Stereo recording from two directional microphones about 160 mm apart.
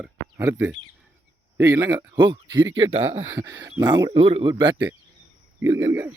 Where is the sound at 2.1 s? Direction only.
25° right (ahead or behind).